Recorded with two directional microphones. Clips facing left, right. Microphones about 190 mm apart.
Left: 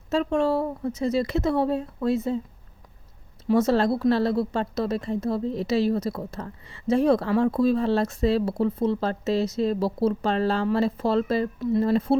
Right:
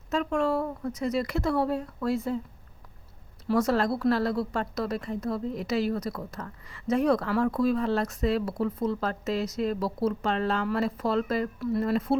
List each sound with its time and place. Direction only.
0.1 s a woman's voice: 30° left (ahead or behind)
3.4 s a woman's voice: 25° left (ahead or behind)